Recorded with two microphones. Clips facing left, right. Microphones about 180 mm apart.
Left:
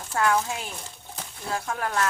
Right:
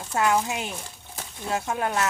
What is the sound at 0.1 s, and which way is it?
Speech, 20° right (ahead or behind).